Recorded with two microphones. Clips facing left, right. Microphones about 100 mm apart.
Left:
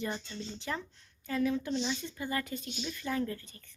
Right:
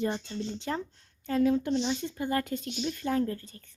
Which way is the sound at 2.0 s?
50° right (ahead or behind).